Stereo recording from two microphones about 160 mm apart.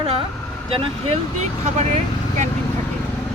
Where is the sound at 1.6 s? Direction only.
45° right (ahead or behind).